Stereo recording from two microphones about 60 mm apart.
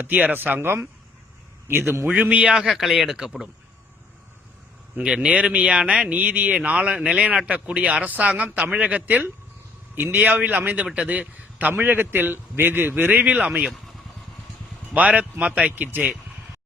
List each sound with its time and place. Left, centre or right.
0.0 s a man's voice: right
2.2 s speech: right; by 3.4 s centre
4.9 s a man's voice: centre; by 13.1 s right
13.1 s speech: right
14.9 s speech: right
15.7 s speech: right